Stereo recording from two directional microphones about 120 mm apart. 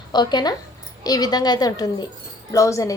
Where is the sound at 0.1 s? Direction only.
35° left (ahead or behind).